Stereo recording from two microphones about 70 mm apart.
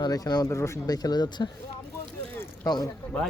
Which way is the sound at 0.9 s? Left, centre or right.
Left.